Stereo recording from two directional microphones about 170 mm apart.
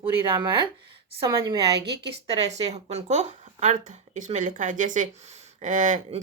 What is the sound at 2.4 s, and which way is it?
Speech, 40° right (ahead or behind).